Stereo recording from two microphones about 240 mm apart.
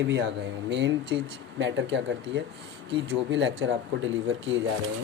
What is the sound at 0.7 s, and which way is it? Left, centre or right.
Speech, right.